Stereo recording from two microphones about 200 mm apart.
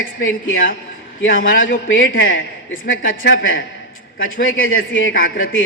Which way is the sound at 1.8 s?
75° left (ahead or behind).